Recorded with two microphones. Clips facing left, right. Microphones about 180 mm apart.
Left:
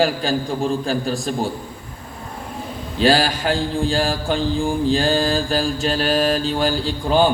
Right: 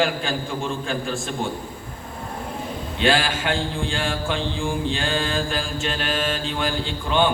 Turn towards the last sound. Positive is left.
turn(degrees=35)  # may be behind; listen again after turning